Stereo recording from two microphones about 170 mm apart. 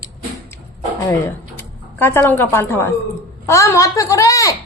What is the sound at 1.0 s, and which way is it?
A woman's voice, 15° left (ahead or behind).